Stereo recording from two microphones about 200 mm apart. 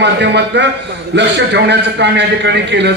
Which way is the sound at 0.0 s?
60° right (ahead or behind).